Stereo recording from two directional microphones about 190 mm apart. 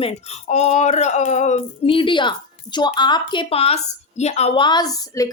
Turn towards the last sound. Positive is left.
turn(degrees=20)  # may be behind; listen again after turning